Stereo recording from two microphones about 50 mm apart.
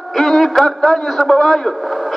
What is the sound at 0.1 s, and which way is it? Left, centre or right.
A man's voice, centre.